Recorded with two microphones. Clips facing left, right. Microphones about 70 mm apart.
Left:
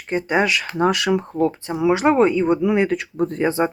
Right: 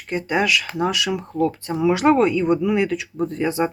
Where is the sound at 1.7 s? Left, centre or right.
Centre.